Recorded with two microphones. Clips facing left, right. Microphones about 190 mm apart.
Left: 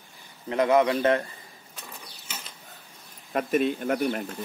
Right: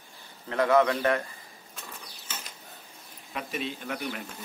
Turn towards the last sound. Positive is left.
turn(degrees=45)  # may be behind; listen again after turning